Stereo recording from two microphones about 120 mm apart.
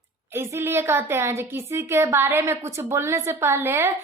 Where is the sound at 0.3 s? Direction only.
20° right (ahead or behind).